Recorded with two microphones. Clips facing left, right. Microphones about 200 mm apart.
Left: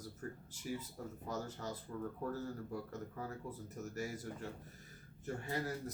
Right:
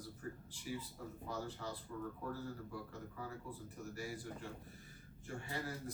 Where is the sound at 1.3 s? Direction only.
45° left (ahead or behind).